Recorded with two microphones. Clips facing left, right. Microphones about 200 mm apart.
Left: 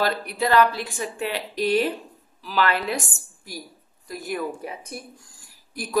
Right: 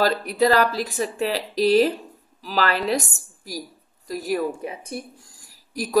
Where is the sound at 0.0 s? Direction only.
40° right (ahead or behind).